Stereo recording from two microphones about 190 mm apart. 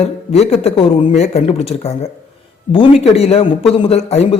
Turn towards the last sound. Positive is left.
turn(degrees=35)  # may be behind; listen again after turning